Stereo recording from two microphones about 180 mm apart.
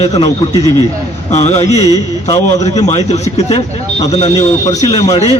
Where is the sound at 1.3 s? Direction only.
40° left (ahead or behind).